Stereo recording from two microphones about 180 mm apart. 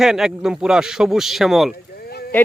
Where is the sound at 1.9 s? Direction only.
60° left (ahead or behind).